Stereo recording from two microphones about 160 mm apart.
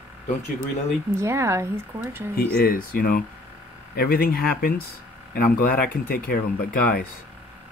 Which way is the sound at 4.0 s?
70° left (ahead or behind).